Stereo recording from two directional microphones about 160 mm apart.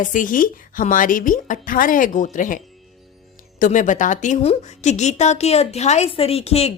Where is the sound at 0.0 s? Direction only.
55° left (ahead or behind).